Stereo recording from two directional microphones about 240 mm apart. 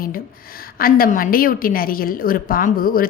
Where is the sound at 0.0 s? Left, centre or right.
Left.